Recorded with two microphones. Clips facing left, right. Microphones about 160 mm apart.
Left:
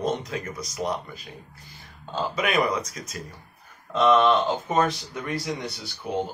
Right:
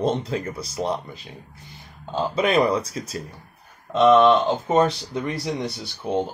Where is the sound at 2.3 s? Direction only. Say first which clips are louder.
Right 5 dB; 30° right (ahead or behind).